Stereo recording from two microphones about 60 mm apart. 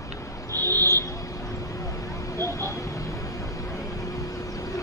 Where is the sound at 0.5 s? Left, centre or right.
Right.